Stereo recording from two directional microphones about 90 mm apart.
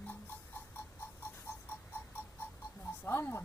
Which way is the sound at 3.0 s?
25° left (ahead or behind).